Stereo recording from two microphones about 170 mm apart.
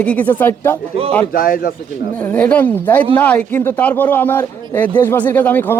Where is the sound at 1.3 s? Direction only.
60° left (ahead or behind).